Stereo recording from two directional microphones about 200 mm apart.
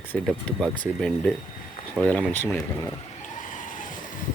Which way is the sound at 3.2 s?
40° left (ahead or behind).